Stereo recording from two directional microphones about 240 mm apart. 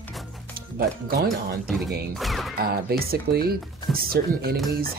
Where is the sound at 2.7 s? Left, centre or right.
Right.